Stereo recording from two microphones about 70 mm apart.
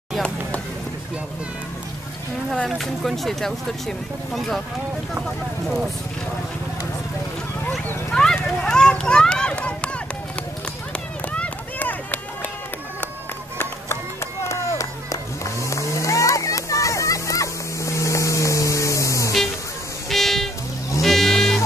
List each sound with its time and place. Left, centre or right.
2.5 s speech: centre
8.1 s run: centre
11.3 s run: left
14.4 s chop: left
15.6 s a sound: left
20.1 s music: centre
21.0 s sheep: centre